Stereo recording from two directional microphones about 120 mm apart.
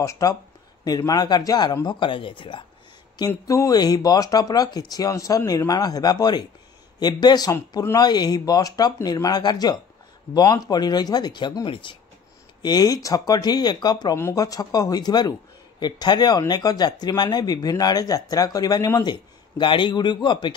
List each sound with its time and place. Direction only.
0.0 s speech: 30° left (ahead or behind); by 2.6 s 45° left (ahead or behind)
3.2 s speech: 30° left (ahead or behind); by 12.0 s 45° left (ahead or behind)
12.6 s speech: 35° left (ahead or behind)
14.1 s speech: 25° left (ahead or behind)
19.6 s speech: 40° left (ahead or behind)